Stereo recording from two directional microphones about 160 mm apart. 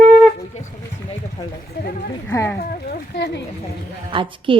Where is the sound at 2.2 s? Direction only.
15° left (ahead or behind).